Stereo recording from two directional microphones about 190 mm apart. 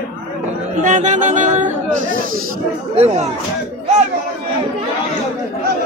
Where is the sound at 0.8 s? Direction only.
40° right (ahead or behind).